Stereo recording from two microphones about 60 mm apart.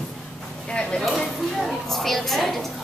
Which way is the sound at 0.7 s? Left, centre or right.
Centre.